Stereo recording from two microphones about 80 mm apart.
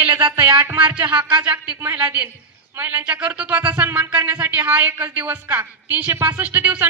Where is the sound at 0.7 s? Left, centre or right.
Centre.